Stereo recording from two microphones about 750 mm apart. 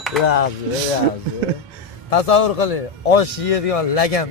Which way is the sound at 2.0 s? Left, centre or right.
Left.